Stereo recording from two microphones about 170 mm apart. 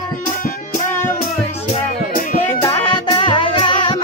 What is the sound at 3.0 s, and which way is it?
Music, 30° left (ahead or behind).